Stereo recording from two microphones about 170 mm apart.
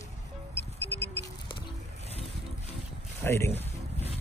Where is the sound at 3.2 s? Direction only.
15° left (ahead or behind).